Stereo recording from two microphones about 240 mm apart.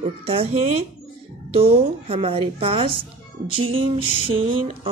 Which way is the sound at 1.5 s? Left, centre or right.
Right.